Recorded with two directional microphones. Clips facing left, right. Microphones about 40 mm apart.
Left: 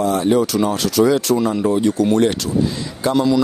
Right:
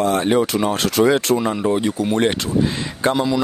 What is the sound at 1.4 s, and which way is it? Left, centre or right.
Speech, right.